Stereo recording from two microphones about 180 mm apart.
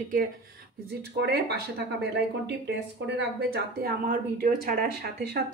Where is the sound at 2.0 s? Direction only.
75° right (ahead or behind); by 4.8 s 50° right (ahead or behind).